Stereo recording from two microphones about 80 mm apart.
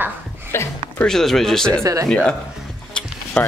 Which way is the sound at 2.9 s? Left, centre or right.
Centre.